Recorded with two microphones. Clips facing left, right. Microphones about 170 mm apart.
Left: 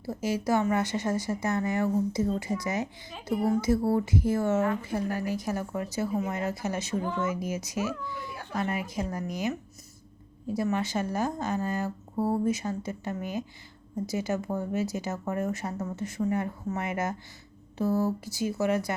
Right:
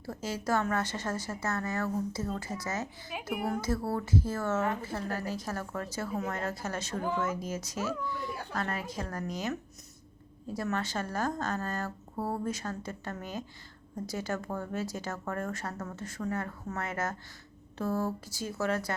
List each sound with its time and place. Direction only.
0.0 s speech: 10° left (ahead or behind)
3.1 s speech: 10° right (ahead or behind)
3.4 s speech: 10° left (ahead or behind)